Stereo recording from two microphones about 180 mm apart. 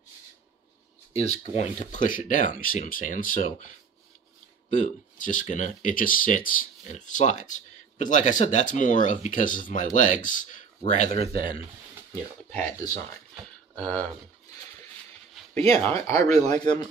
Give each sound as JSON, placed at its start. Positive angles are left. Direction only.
{"t": 1.1, "sound": "speech", "side_deg": 35}
{"t": 4.7, "sound": "speech", "side_deg": 45}
{"t": 13.7, "sound": "speech", "side_deg": 10}
{"t": 15.5, "sound": "speech", "side_deg": -35}
{"t": 15.8, "sound": "speech", "side_deg": 15}